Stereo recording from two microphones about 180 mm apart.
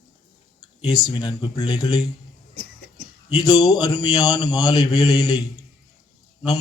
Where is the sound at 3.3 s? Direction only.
20° left (ahead or behind).